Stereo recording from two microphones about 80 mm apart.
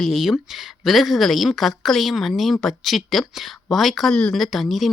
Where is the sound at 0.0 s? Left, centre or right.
Centre.